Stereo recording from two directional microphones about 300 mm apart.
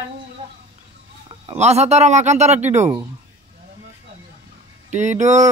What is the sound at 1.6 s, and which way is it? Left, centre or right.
Speech, right.